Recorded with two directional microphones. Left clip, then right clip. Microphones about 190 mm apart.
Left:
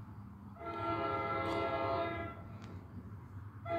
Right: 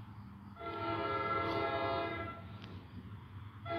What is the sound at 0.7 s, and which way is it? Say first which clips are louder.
Train: even; 15° left (ahead or behind).